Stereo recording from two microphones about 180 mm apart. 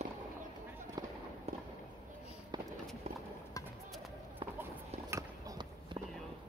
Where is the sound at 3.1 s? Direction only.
35° right (ahead or behind).